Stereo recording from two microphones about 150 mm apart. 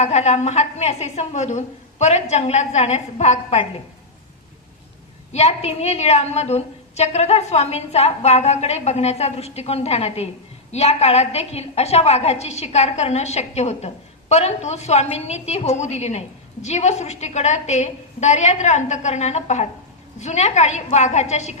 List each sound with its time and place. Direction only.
0.0 s a woman's voice: 50° left (ahead or behind)
5.3 s a woman's voice: 45° left (ahead or behind)